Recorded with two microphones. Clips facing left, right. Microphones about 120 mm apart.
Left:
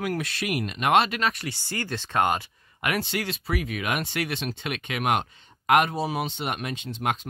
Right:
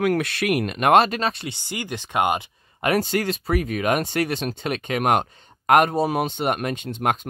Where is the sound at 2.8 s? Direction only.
40° right (ahead or behind).